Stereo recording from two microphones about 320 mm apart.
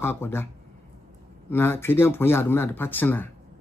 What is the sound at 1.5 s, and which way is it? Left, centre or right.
Speech, centre.